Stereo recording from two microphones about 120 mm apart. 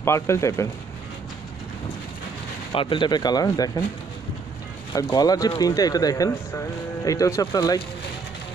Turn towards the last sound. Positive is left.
turn(degrees=30)  # may be behind; listen again after turning